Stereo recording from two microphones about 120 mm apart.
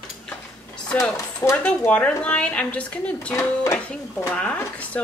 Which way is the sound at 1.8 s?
10° left (ahead or behind).